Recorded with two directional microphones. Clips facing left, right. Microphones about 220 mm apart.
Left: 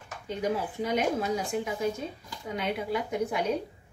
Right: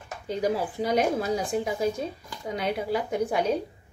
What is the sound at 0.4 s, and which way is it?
A woman's voice, 35° right (ahead or behind).